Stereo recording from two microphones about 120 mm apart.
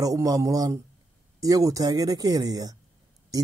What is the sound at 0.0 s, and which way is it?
Speech, 30° right (ahead or behind).